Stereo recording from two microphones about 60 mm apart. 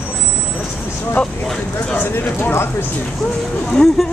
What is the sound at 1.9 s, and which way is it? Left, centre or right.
Clip-clop, left.